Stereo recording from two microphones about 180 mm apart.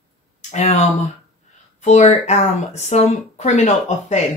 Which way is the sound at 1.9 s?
40° left (ahead or behind).